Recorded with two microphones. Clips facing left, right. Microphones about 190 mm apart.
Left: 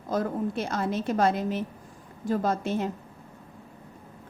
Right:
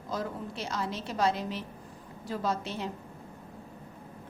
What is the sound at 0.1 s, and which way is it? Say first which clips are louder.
A woman's voice: left 8 dB; 50° left (ahead or behind).